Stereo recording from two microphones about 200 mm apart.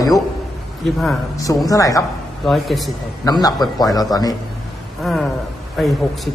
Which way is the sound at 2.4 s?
Centre (ahead or behind).